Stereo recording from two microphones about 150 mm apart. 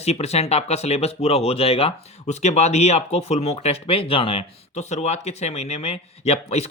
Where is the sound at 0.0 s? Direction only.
45° left (ahead or behind).